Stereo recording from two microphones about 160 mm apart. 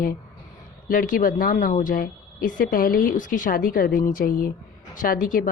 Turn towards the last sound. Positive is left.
turn(degrees=60)  # may be behind; listen again after turning